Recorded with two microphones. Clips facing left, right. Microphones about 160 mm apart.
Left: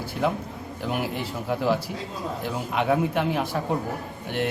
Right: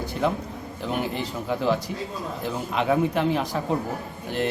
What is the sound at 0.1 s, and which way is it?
Speech, 5° left (ahead or behind).